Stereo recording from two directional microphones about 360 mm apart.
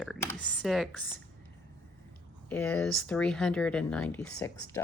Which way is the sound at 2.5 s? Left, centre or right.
Centre.